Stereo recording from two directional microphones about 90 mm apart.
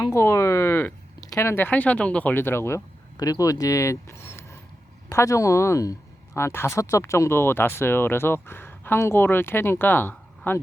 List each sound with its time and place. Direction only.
0.1 s speech: 35° left (ahead or behind)
3.2 s speech: 40° left (ahead or behind); by 10.6 s 20° left (ahead or behind)